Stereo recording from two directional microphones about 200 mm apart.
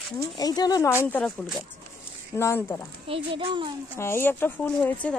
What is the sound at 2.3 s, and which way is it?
Speech, 10° left (ahead or behind).